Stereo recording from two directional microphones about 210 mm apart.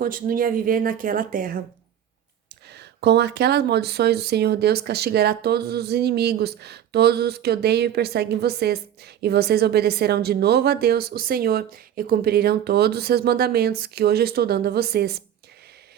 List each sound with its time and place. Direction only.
0.0 s speech: 40° right (ahead or behind)
2.6 s speech: 50° right (ahead or behind)